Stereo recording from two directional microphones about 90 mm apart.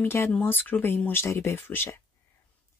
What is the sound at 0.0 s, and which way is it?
Speech, 25° left (ahead or behind).